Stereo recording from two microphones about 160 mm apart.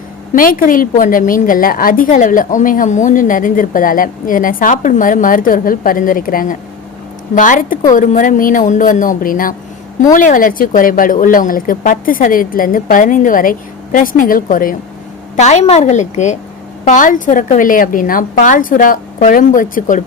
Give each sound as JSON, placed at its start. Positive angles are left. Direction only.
{"t": 0.3, "sound": "a woman's voice", "side_deg": 60}
{"t": 15.4, "sound": "a woman's voice", "side_deg": 45}